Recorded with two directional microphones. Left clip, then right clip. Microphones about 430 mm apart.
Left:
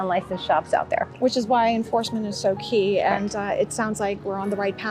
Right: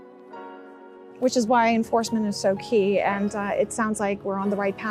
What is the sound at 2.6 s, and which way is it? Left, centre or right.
Speech, right.